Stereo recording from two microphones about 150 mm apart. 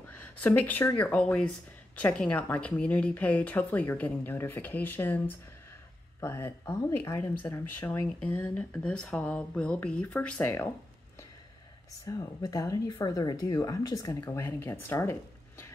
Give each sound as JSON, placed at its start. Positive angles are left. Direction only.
{"t": 0.4, "sound": "speech", "side_deg": 10}
{"t": 10.4, "sound": "speech", "side_deg": 20}
{"t": 12.1, "sound": "speech", "side_deg": 25}